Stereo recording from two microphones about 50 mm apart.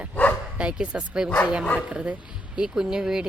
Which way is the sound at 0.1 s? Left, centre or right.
Left.